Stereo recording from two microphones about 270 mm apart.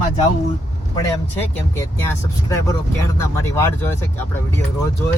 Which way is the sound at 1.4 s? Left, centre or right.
Centre.